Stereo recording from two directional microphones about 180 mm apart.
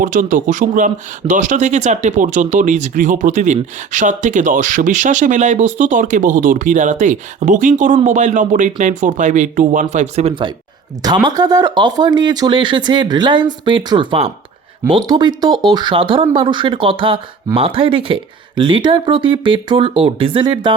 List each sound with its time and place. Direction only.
0.0 s speech: 45° right (ahead or behind); by 20.7 s 25° right (ahead or behind)